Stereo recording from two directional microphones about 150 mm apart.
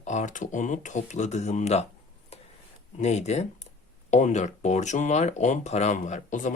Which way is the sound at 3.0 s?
50° left (ahead or behind).